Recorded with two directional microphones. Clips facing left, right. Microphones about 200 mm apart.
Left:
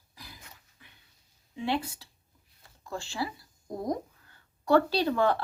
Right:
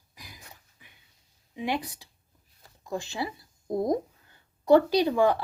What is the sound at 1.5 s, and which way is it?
Speech, 15° right (ahead or behind).